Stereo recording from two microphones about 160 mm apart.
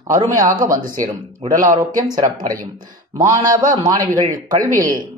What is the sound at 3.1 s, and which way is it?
Speech, 20° right (ahead or behind).